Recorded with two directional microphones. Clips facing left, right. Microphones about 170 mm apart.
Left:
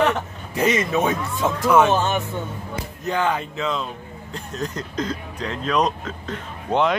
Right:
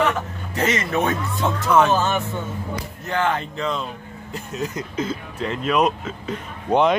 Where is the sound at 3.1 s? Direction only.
15° left (ahead or behind).